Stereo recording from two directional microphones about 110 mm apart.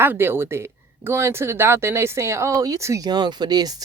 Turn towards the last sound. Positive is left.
turn(degrees=-35)  # may be behind; listen again after turning